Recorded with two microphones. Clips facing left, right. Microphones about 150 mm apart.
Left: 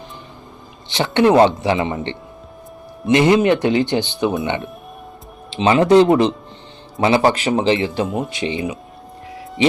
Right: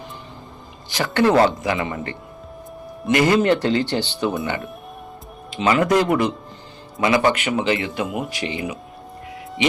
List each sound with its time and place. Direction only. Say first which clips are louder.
0.9 s a man's voice: left 3 dB; 25° left (ahead or behind)